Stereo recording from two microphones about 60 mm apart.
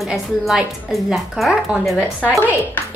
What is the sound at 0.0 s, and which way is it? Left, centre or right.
A woman's voice, centre.